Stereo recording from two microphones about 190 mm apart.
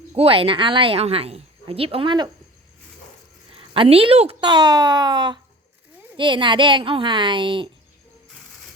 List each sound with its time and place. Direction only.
0.2 s a woman's voice: 30° right (ahead or behind)
3.5 s a woman's voice: 30° right (ahead or behind)